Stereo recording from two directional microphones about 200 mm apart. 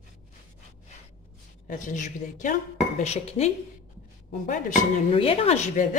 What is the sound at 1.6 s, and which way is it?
A woman's voice, 40° left (ahead or behind).